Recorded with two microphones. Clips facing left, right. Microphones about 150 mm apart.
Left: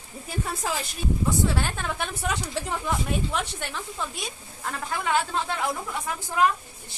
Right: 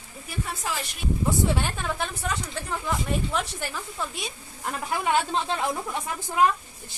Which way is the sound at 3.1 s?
Centre (ahead or behind).